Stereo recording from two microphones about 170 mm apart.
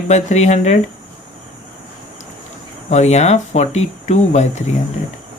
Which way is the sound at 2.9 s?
40° left (ahead or behind).